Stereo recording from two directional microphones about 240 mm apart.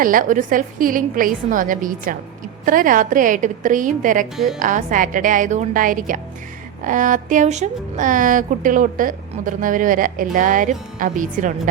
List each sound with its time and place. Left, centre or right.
0.0 s a woman's voice: right
4.4 s a woman's voice: centre
4.6 s a woman's voice: right